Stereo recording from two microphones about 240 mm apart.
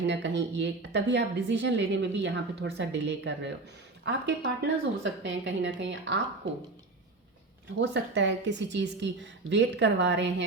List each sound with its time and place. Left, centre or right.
0.0 s a woman's voice: right
7.8 s a woman's voice: right